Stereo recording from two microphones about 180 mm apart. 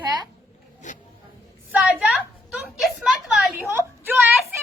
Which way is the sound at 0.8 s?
45° left (ahead or behind).